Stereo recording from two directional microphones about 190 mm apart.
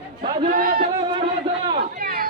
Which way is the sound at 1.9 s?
50° right (ahead or behind).